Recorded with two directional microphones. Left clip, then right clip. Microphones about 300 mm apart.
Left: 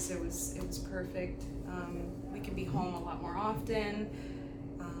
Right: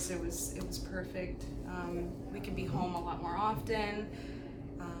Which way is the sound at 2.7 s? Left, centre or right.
Centre.